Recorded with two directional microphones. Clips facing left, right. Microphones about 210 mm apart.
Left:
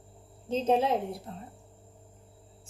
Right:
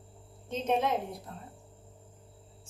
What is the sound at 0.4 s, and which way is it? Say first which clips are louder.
Speech: left 4 dB; 30° left (ahead or behind).